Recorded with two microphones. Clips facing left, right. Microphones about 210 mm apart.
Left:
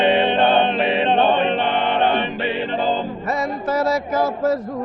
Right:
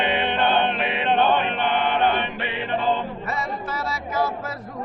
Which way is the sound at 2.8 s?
40° left (ahead or behind).